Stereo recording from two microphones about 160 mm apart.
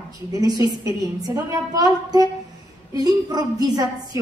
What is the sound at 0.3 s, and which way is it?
A woman's voice, 25° right (ahead or behind).